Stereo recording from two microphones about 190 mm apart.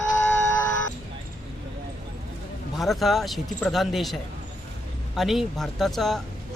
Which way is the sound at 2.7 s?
Centre (ahead or behind).